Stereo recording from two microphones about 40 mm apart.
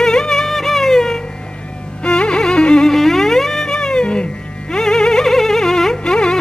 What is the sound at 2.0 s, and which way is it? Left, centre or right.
Music, left.